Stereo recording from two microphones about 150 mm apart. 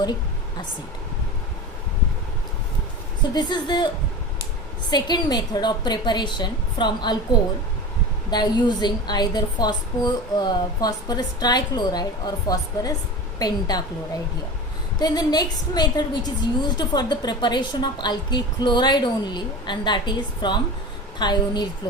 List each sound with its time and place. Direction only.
3.3 s a woman's voice: 30° left (ahead or behind)
4.9 s a woman's voice: 30° left (ahead or behind)
8.3 s a woman's voice: 30° left (ahead or behind)
14.9 s a woman's voice: 30° left (ahead or behind)